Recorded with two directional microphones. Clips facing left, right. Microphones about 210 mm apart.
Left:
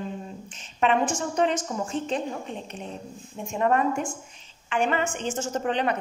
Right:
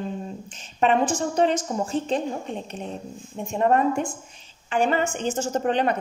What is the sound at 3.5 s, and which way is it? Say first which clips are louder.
Speech: right 3 dB; 35° right (ahead or behind).